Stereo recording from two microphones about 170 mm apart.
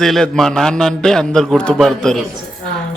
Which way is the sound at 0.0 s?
Centre (ahead or behind).